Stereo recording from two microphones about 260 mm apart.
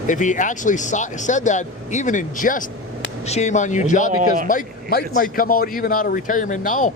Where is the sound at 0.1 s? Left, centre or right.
Left.